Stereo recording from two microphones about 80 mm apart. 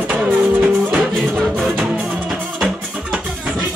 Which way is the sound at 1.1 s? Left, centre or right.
Centre.